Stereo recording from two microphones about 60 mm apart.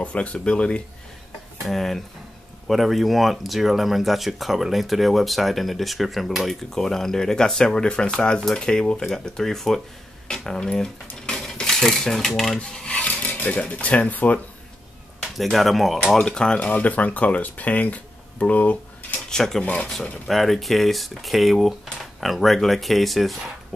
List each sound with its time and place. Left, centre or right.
0.0 s speech: left
1.7 s speech: centre
12.5 s filing: centre
15.3 s speech: centre
16.2 s speech: centre
16.6 s speech: left
19.2 s speech: centre